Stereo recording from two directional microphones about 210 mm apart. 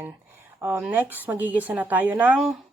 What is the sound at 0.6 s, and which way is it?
A woman's voice, 10° right (ahead or behind).